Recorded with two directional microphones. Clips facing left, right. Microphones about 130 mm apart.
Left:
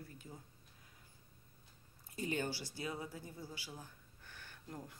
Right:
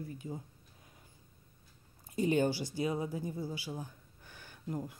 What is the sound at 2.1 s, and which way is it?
Speech, 20° right (ahead or behind).